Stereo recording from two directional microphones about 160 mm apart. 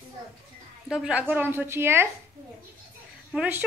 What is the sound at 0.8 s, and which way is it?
A woman's voice, 5° right (ahead or behind).